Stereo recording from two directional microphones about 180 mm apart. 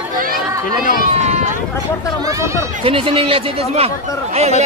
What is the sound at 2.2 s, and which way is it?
Speech, 15° right (ahead or behind).